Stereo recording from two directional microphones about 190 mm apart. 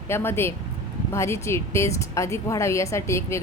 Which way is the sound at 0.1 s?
10° left (ahead or behind).